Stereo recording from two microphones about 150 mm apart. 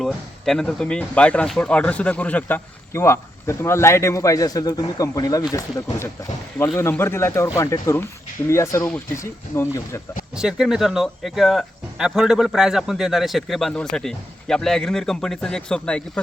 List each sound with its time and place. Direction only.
0.0 s speech: 5° left (ahead or behind); by 10.0 s 20° left (ahead or behind)
10.3 s speech: 5° right (ahead or behind)